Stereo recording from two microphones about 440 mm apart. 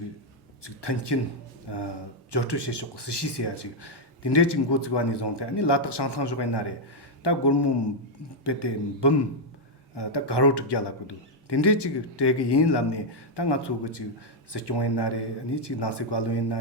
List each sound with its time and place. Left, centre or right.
0.6 s a man's voice: left